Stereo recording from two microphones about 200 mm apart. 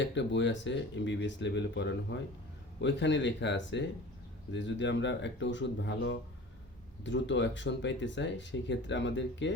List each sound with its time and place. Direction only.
0.0 s speech: 65° left (ahead or behind)